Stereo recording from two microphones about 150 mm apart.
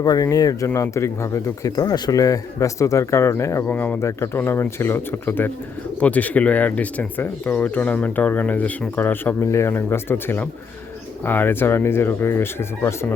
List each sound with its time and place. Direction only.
0.0 s speech: 25° left (ahead or behind)